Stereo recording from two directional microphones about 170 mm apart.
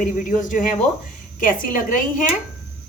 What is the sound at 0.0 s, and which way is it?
Speech, 50° left (ahead or behind).